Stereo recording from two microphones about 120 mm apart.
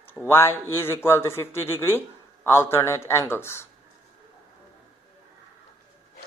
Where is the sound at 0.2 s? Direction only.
20° left (ahead or behind).